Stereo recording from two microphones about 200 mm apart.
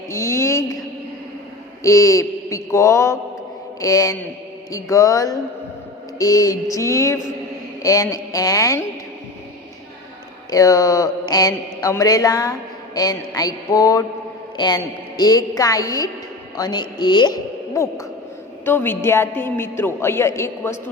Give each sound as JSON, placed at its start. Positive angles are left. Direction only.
{"t": 0.1, "sound": "a sound", "side_deg": 15}
{"t": 1.8, "sound": "mantra", "side_deg": 15}
{"t": 10.5, "sound": "mantra", "side_deg": 15}
{"t": 16.6, "sound": "a woman's voice", "side_deg": 20}
{"t": 18.6, "sound": "mantra", "side_deg": 10}